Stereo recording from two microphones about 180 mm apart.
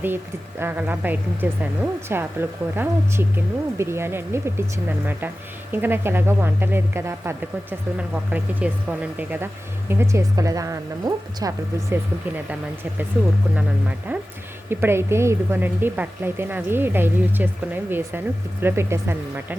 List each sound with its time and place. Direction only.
0.6 s speech: 10° right (ahead or behind)
13.6 s speech: 10° right (ahead or behind)